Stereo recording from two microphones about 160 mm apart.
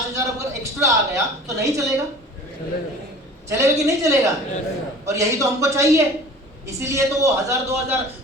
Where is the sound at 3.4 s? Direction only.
20° right (ahead or behind).